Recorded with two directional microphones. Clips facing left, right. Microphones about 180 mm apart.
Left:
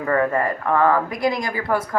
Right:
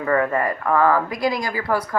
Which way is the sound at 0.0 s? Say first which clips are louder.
Even; 30° left (ahead or behind).